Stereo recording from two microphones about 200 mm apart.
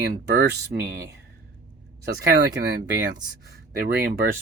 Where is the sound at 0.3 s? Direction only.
55° right (ahead or behind).